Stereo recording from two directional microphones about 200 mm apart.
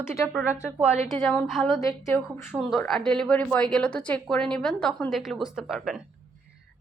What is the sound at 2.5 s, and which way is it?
A woman's voice, centre (ahead or behind).